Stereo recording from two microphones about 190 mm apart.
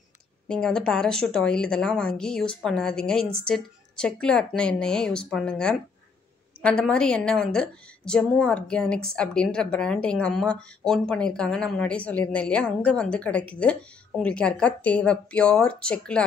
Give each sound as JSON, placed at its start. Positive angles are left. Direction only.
{"t": 0.5, "sound": "a woman's voice", "side_deg": 5}